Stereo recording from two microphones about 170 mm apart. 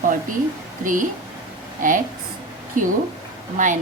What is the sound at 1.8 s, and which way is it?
A woman's voice, 55° right (ahead or behind).